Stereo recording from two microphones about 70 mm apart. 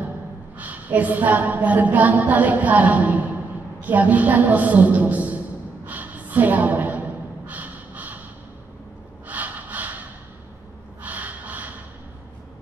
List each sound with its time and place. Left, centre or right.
0.6 s a woman's voice: right
5.9 s a sound: right
9.3 s snort: right
11.0 s snort: right